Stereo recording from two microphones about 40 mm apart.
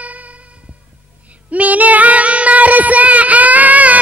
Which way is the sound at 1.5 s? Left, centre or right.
Right.